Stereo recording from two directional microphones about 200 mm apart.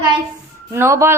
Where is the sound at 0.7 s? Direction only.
15° right (ahead or behind).